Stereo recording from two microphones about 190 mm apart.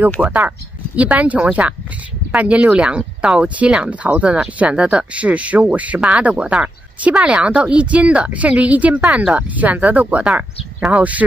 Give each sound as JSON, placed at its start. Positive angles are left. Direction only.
{"t": 0.2, "sound": "speech", "side_deg": -10}